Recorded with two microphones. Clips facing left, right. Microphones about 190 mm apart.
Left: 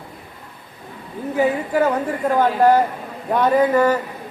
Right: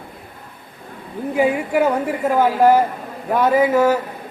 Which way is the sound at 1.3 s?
10° right (ahead or behind).